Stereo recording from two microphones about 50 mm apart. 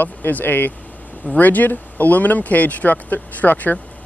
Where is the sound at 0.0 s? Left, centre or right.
Left.